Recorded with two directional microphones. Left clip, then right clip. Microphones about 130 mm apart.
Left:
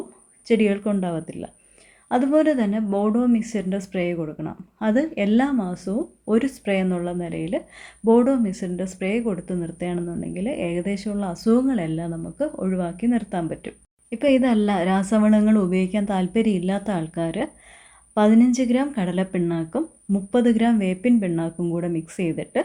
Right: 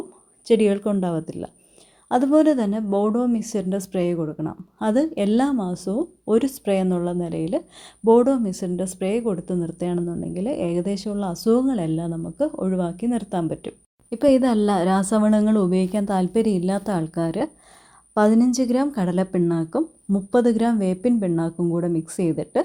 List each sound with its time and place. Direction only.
0.4 s a woman's voice: 50° right (ahead or behind)